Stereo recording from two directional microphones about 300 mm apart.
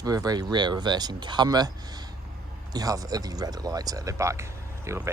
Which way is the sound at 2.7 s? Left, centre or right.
Centre.